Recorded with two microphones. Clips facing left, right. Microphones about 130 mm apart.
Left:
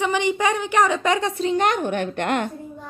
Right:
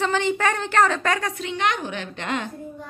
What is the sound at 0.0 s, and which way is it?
Speech, 15° left (ahead or behind).